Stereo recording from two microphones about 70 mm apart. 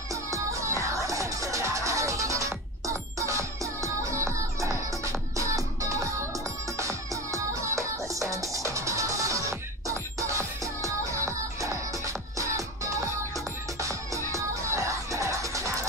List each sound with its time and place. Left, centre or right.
0.1 s music: right